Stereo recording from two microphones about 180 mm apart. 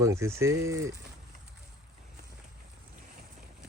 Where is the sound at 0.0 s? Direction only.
15° right (ahead or behind).